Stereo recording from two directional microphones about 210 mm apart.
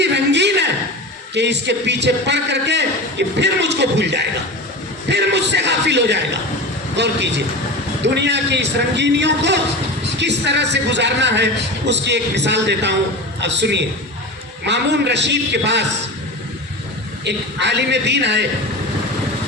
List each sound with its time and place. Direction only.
0.0 s a sound: 55° right (ahead or behind)
1.3 s a man's voice: 55° right (ahead or behind)
17.2 s a man's voice: 55° right (ahead or behind)